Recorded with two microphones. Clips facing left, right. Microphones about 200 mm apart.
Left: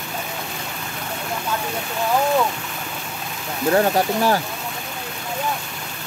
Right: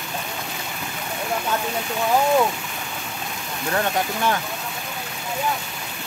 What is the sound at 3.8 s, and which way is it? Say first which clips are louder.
Speech: left 2 dB; 35° left (ahead or behind).